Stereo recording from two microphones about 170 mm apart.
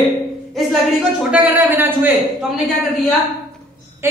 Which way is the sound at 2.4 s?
Centre (ahead or behind).